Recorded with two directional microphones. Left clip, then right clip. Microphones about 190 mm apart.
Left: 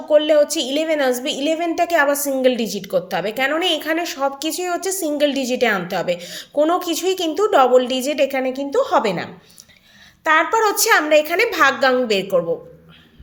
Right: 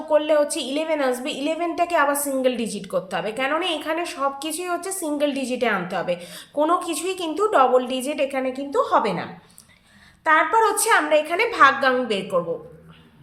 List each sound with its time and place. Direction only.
0.1 s a woman's voice: 25° left (ahead or behind)